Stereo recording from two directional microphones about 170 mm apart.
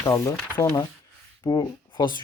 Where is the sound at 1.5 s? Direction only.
25° left (ahead or behind).